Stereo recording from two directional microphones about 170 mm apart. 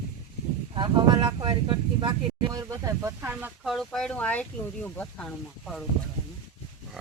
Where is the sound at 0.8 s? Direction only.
25° right (ahead or behind); by 3.5 s 10° right (ahead or behind).